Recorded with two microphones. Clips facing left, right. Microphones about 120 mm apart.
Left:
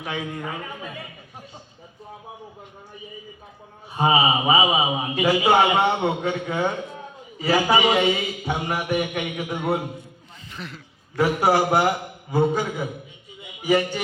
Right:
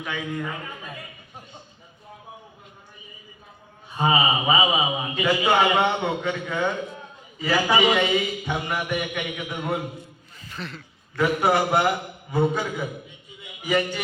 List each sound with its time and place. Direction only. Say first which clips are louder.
0.0 s a man's voice: even; 30° left (ahead or behind)
3.9 s a man's voice: left 2 dB; 25° left (ahead or behind)
10.5 s speech: right 1 dB; 15° left (ahead or behind)
11.2 s a man's voice: left 2 dB; 30° left (ahead or behind)